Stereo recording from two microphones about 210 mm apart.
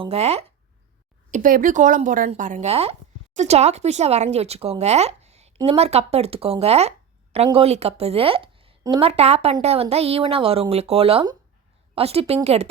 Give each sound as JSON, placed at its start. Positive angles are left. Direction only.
{"t": 0.0, "sound": "speech", "side_deg": -30}
{"t": 1.3, "sound": "speech", "side_deg": -40}